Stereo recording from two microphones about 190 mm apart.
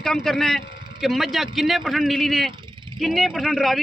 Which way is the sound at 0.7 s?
25° right (ahead or behind).